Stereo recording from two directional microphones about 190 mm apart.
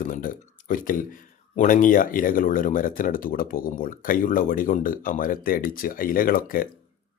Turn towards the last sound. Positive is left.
turn(degrees=50)  # may be behind; listen again after turning